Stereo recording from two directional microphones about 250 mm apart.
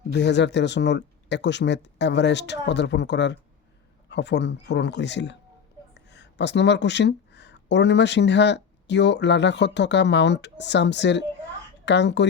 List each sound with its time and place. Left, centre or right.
0.1 s speech: left